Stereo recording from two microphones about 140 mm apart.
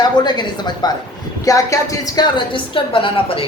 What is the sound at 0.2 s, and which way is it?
A woman's voice, 30° left (ahead or behind).